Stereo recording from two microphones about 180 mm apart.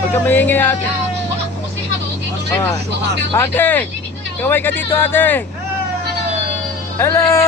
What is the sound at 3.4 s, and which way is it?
Speech, 10° left (ahead or behind).